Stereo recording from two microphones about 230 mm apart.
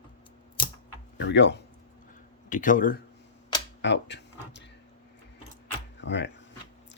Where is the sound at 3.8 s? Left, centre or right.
Left.